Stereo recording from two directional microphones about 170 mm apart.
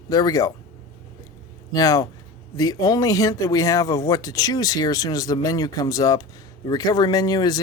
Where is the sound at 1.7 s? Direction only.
20° left (ahead or behind).